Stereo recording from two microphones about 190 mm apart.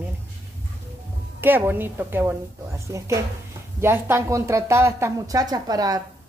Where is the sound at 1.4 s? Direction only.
10° right (ahead or behind).